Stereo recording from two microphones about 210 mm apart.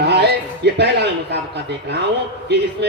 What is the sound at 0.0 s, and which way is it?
A man's voice, 55° right (ahead or behind).